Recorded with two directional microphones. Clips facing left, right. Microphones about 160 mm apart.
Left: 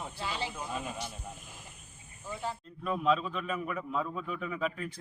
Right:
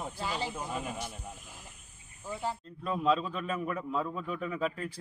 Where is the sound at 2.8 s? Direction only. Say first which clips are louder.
Even; 30° right (ahead or behind).